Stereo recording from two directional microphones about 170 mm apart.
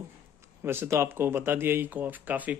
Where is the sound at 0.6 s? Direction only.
15° right (ahead or behind).